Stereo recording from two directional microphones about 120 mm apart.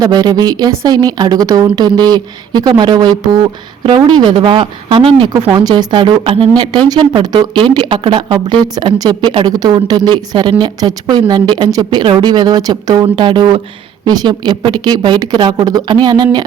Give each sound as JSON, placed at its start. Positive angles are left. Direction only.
{"t": 0.0, "sound": "speech", "side_deg": -35}
{"t": 5.3, "sound": "speech", "side_deg": -35}
{"t": 6.6, "sound": "speech", "side_deg": -35}